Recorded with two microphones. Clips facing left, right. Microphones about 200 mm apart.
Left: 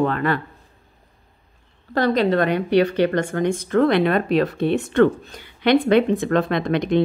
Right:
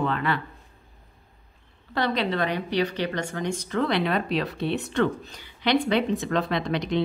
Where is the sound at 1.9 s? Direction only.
45° left (ahead or behind).